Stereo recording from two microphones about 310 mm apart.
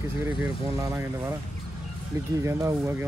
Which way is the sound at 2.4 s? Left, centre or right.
Centre.